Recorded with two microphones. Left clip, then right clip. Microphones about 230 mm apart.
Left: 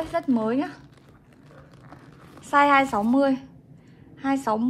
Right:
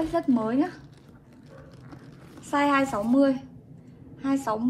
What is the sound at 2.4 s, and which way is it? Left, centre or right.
A woman's voice, left.